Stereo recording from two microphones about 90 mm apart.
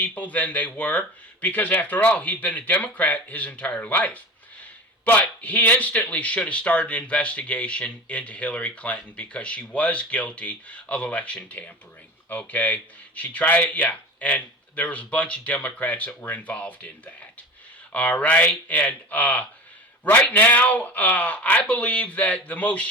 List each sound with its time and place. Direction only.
0.0 s speech: 15° left (ahead or behind)